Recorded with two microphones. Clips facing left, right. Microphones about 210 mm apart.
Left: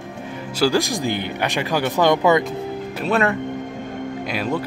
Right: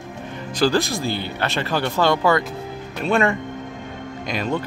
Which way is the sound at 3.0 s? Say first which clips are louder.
Right 1 dB; centre (ahead or behind).